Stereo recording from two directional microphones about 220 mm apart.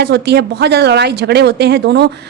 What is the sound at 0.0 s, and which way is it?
A woman's voice, 50° right (ahead or behind).